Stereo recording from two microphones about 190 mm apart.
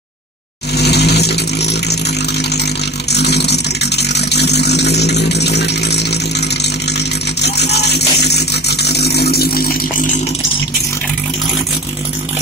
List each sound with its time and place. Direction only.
0.7 s vehicle: 60° left (ahead or behind)